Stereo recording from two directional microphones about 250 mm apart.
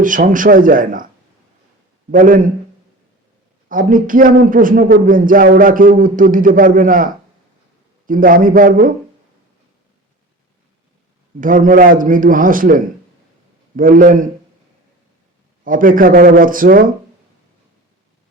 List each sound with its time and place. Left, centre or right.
0.0 s a man's voice: right
2.1 s a man's voice: right
3.7 s a man's voice: right
11.3 s a man's voice: right
15.6 s a man's voice: right